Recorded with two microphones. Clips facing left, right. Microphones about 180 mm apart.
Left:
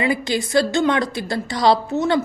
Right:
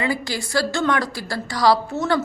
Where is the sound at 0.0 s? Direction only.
20° left (ahead or behind).